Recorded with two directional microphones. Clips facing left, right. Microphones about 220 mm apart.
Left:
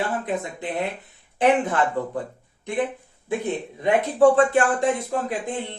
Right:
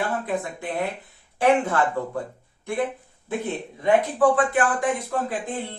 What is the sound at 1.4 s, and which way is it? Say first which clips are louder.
Speech: even; 20° left (ahead or behind).